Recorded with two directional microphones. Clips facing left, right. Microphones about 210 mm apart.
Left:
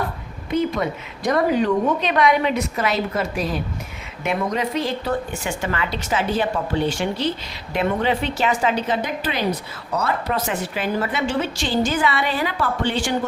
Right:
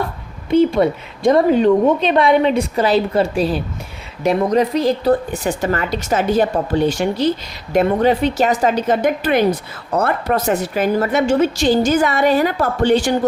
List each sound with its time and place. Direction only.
0.5 s a woman's voice: 30° right (ahead or behind)